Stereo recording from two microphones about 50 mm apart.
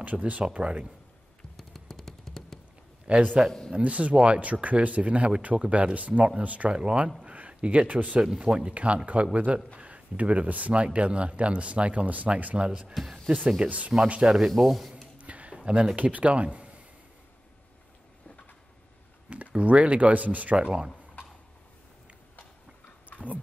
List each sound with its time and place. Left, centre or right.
0.0 s speech: right
1.6 s a sound: centre
3.1 s a man's voice: right
7.2 s a sound: right
7.9 s speech: right
8.2 s speech: centre
12.9 s speech: centre
13.7 s speech: right
14.2 s speech: centre
15.1 s a sound: right
16.0 s speech: right
19.2 s speech: right
20.5 s speech: centre
23.1 s a sound: right